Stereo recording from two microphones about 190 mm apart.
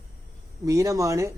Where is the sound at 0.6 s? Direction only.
15° right (ahead or behind).